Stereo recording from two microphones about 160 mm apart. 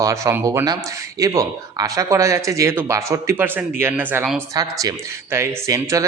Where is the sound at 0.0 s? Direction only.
20° right (ahead or behind).